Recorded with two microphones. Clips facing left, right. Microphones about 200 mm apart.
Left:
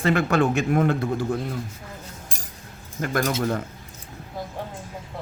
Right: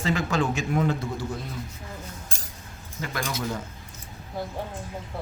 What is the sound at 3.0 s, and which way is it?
Speech, 50° left (ahead or behind).